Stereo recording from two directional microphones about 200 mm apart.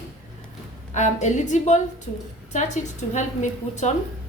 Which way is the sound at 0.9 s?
35° left (ahead or behind).